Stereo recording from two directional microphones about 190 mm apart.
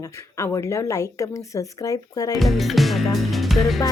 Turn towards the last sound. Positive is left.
turn(degrees=0)  # may be behind; listen again after turning